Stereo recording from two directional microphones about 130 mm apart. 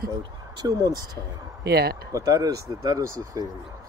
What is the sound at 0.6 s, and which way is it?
Speech, 30° right (ahead or behind).